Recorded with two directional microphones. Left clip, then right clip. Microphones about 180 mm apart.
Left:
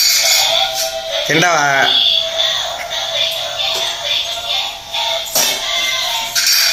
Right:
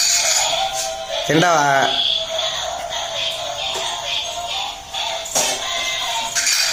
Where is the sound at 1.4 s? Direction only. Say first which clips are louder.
Left 2 dB; 20° right (ahead or behind).